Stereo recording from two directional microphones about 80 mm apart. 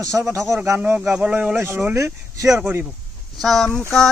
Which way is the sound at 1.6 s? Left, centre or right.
Right.